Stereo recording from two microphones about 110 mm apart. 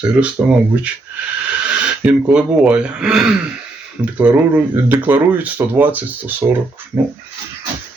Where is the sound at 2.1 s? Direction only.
10° right (ahead or behind).